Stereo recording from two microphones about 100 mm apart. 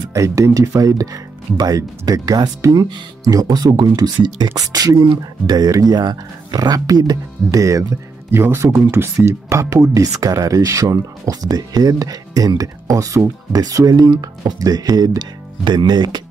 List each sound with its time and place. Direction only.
0.1 s speech: 35° right (ahead or behind)